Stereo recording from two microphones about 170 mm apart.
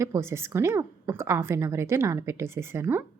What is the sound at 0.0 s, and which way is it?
A woman's voice, 15° right (ahead or behind).